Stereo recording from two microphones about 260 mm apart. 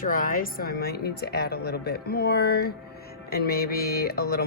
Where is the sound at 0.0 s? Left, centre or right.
Left.